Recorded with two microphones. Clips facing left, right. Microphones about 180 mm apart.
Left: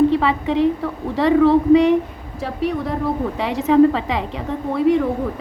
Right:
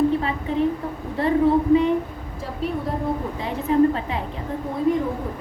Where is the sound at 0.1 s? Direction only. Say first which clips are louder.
Left 5 dB; 85° left.